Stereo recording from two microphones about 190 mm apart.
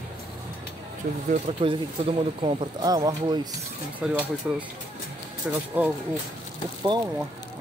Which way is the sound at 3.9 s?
10° right (ahead or behind).